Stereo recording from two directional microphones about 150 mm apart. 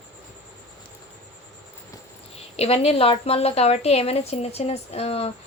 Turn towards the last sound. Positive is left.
turn(degrees=45)  # may be behind; listen again after turning